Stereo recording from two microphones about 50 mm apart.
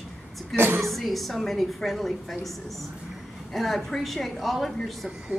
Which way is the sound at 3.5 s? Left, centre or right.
Centre.